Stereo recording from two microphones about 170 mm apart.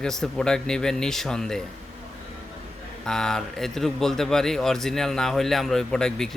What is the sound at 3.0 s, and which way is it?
Speech, 5° left (ahead or behind).